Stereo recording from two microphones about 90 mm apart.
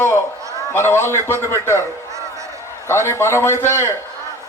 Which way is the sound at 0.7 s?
30° left (ahead or behind).